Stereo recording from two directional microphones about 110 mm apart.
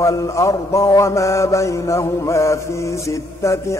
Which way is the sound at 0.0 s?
30° left (ahead or behind).